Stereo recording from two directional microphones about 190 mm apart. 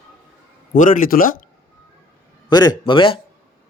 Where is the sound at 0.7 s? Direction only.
45° left (ahead or behind).